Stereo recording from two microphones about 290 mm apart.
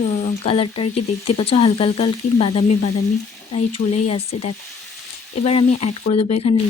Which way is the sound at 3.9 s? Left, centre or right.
Left.